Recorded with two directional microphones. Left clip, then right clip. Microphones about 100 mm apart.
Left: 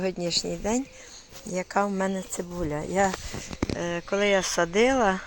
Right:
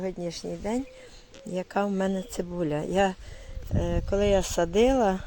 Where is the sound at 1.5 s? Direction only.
25° right (ahead or behind).